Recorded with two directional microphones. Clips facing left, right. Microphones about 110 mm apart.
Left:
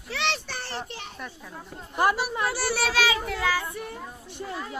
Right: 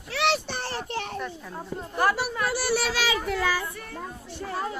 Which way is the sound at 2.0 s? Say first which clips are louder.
Left 1 dB; 20° left (ahead or behind).